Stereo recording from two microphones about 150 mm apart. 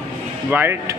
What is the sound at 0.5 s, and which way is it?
Speech, 15° right (ahead or behind).